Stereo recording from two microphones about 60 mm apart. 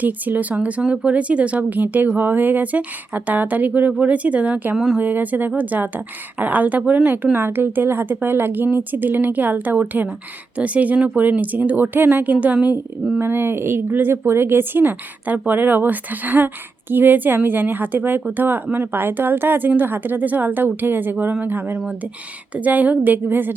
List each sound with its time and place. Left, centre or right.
0.0 s speech: right
13.1 s speech: right